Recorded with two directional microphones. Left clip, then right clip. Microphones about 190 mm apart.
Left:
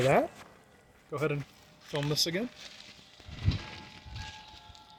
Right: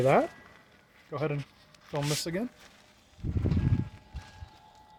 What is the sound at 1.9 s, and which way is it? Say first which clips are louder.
Speech: left 1 dB; 60° right (ahead or behind).